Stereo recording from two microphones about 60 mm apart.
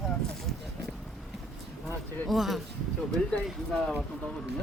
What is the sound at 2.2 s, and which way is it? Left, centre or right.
Speech, centre.